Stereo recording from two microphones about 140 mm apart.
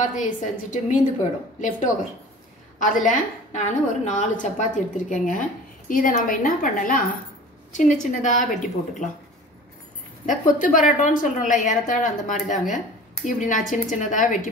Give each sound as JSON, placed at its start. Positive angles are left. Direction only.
{"t": 0.0, "sound": "a woman's voice", "side_deg": 60}
{"t": 2.8, "sound": "a woman's voice", "side_deg": 65}
{"t": 7.7, "sound": "a woman's voice", "side_deg": 60}
{"t": 10.2, "sound": "a woman's voice", "side_deg": 65}